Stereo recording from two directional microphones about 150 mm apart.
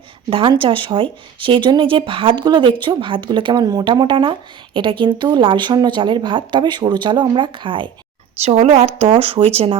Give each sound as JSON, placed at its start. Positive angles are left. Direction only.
{"t": 0.3, "sound": "speech", "side_deg": -35}
{"t": 8.4, "sound": "speech", "side_deg": -45}